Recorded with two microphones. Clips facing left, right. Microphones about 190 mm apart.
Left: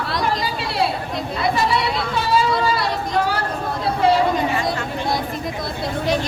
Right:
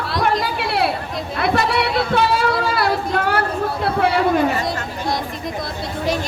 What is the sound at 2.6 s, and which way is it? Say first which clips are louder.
Child singing: right 2 dB; 60° right (ahead or behind).